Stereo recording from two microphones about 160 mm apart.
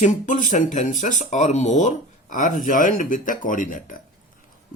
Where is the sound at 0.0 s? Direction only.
50° left (ahead or behind).